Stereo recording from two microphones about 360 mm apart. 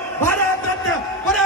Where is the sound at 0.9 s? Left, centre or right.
Centre.